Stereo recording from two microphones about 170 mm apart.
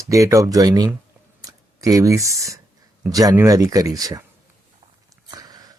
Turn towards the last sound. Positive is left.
turn(degrees=-20)  # may be behind; listen again after turning